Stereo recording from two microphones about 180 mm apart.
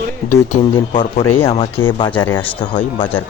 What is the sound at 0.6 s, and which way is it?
Speech, 30° left (ahead or behind).